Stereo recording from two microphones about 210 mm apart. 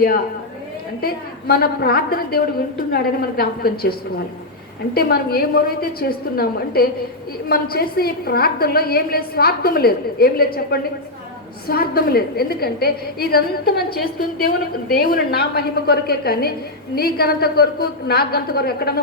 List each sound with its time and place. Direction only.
1.0 s a woman's voice: 45° left (ahead or behind)
4.9 s a woman's voice: 45° left (ahead or behind)